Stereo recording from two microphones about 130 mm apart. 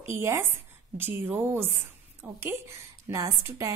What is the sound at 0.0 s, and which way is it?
A woman's voice, 20° right (ahead or behind).